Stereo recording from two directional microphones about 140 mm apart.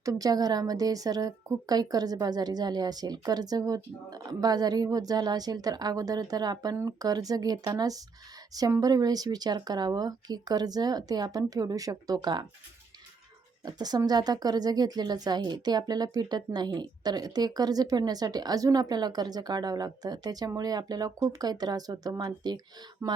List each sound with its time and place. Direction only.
0.0 s speech: 25° right (ahead or behind)
13.7 s speech: 30° right (ahead or behind)